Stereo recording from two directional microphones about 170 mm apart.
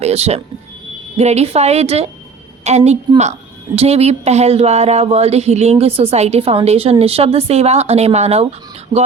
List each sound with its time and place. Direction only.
0.0 s a woman's voice: 40° right (ahead or behind)